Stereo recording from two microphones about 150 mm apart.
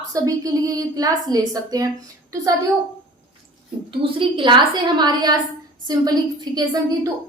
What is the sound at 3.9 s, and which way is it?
A woman's voice, 35° right (ahead or behind).